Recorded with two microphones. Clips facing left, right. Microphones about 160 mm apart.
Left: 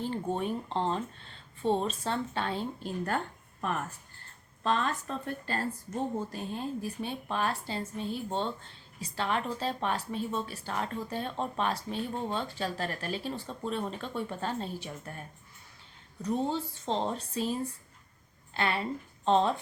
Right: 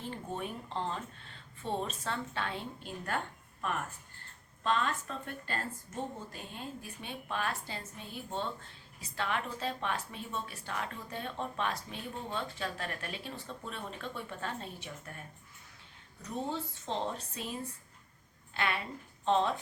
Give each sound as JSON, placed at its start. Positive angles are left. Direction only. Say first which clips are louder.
{"t": 0.0, "sound": "speech", "louder": "left 7 dB", "side_deg": 30}
{"t": 4.6, "sound": "speech", "louder": "left 2 dB", "side_deg": 35}
{"t": 16.5, "sound": "a woman's voice", "louder": "left 5 dB", "side_deg": 30}